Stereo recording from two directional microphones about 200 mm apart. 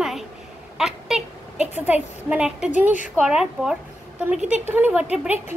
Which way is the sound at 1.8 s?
5° right (ahead or behind).